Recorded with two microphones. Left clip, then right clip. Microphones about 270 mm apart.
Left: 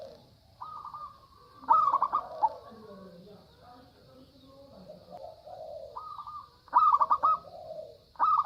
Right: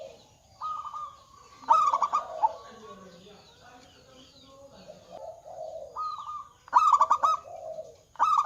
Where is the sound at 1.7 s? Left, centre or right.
Centre.